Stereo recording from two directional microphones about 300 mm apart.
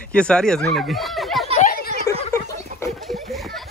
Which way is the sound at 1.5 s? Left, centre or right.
Left.